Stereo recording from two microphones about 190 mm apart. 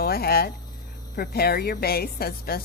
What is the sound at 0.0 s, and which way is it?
A woman's voice, 55° left (ahead or behind).